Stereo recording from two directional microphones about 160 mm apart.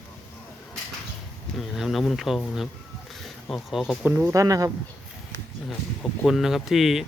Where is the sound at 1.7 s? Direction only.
Centre (ahead or behind).